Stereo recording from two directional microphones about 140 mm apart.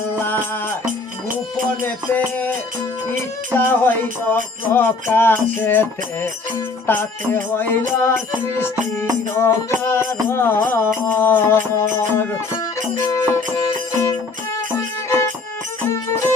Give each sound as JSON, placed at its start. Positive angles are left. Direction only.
{"t": 1.8, "sound": "music", "side_deg": 10}
{"t": 3.7, "sound": "music", "side_deg": 15}